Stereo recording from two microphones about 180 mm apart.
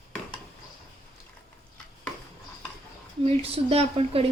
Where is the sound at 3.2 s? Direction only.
35° right (ahead or behind).